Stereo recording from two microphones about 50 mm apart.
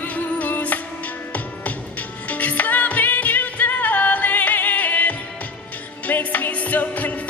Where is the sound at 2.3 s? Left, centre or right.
Left.